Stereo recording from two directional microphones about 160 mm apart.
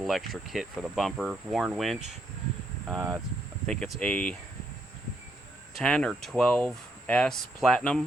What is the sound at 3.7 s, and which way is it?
Speech, 5° left (ahead or behind).